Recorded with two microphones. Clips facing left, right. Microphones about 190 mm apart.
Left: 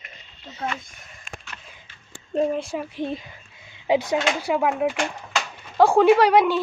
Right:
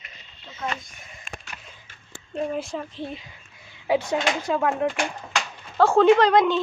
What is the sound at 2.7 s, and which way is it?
Speech, 10° left (ahead or behind).